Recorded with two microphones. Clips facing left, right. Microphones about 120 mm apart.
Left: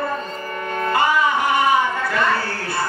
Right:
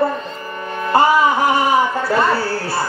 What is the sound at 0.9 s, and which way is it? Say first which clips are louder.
Speech: right 5 dB; 35° right (ahead or behind).